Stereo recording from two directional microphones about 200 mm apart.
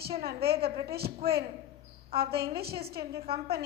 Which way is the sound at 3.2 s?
30° right (ahead or behind).